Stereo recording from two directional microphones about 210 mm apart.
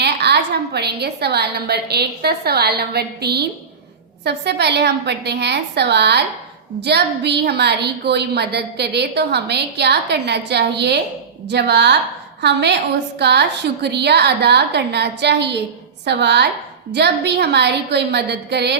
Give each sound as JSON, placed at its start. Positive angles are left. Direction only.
{"t": 0.0, "sound": "a woman's voice", "side_deg": -50}